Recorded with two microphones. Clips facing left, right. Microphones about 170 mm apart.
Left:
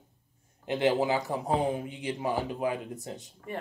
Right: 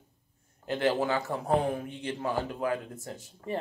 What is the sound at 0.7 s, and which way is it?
Speech, 15° left (ahead or behind).